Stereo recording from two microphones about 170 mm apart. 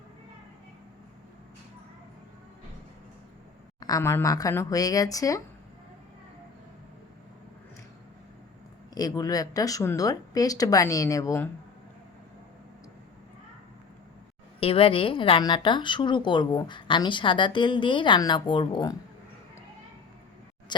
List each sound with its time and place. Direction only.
3.8 s a woman's voice: 20° left (ahead or behind)
9.0 s a woman's voice: 20° left (ahead or behind)
14.6 s a woman's voice: 35° left (ahead or behind)